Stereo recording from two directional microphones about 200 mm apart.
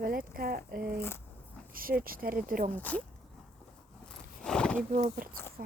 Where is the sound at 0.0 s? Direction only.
45° right (ahead or behind).